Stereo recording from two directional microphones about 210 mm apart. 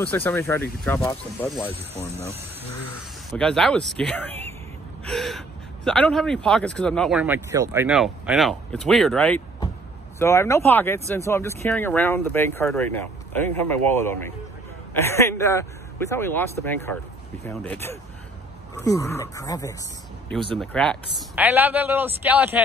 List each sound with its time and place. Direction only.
0.0 s speech: 10° left (ahead or behind)
3.3 s speech: 5° left (ahead or behind)
5.0 s gasp: centre (ahead or behind)
5.9 s speech: 5° left (ahead or behind)
20.5 s speech: 5° left (ahead or behind)
21.4 s a man's voice: 10° right (ahead or behind)